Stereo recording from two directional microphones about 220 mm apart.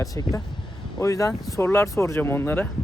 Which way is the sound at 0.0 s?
15° left (ahead or behind).